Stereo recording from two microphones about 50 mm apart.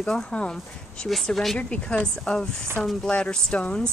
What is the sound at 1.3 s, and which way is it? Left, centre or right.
Speech, centre.